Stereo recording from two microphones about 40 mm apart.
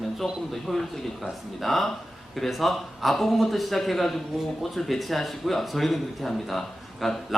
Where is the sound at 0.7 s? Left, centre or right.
Right.